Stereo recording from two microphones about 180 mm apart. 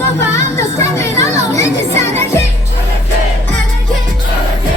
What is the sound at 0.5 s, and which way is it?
Music, 15° left (ahead or behind).